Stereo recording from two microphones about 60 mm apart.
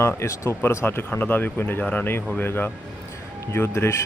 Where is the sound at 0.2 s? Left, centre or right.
Left.